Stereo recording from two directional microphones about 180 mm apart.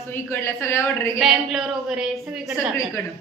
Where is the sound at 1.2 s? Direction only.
Centre (ahead or behind).